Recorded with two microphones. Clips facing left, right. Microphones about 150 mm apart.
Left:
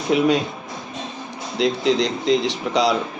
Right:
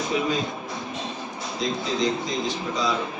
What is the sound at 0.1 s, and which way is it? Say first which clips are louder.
Speech: left 10 dB; 70° left (ahead or behind).